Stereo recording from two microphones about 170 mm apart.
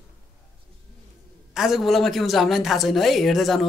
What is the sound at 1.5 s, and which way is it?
A woman's voice, 5° right (ahead or behind).